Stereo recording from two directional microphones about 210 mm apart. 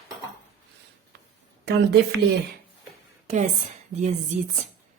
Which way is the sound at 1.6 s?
55° right (ahead or behind).